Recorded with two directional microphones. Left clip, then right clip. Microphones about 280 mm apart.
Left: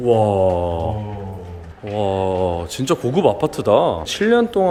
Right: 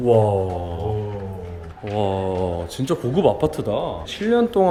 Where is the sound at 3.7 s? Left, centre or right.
Centre.